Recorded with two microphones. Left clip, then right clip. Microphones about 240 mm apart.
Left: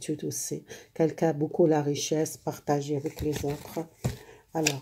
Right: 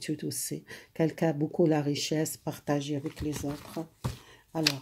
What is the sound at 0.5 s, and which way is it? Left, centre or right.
Speech, right.